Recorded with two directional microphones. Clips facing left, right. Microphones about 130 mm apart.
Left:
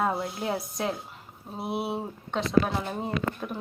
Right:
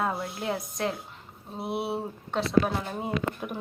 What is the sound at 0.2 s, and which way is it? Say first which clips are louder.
A woman's voice: left 1 dB; centre (ahead or behind).